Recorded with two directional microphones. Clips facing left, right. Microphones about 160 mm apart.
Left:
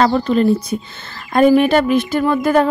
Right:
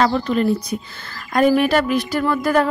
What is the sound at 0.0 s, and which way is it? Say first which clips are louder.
A woman's voice: left 4 dB; 30° left (ahead or behind).